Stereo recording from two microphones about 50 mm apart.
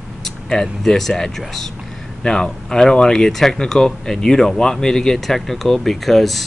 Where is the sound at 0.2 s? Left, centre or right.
Centre.